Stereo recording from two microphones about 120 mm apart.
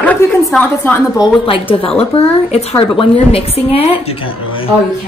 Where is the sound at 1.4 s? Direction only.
50° left (ahead or behind).